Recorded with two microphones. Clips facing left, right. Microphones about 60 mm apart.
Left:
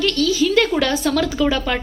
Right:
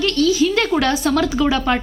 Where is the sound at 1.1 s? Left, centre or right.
Centre.